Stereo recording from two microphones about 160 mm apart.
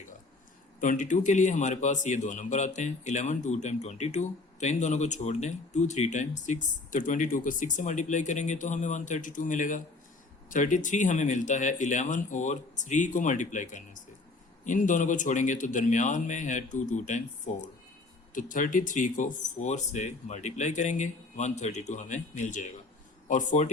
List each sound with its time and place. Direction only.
0.8 s a man's voice: 50° left (ahead or behind)